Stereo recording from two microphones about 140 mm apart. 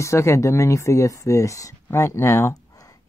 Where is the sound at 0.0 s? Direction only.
20° left (ahead or behind).